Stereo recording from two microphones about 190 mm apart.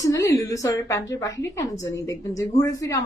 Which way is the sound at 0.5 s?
15° left (ahead or behind).